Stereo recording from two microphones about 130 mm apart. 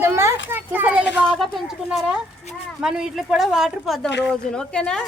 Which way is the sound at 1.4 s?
Centre (ahead or behind).